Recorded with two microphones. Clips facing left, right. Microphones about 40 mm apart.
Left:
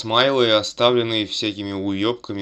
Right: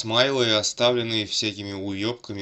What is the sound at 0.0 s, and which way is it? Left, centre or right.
Speech, left.